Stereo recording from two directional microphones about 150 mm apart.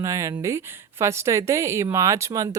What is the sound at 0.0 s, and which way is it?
A woman's voice, 20° right (ahead or behind).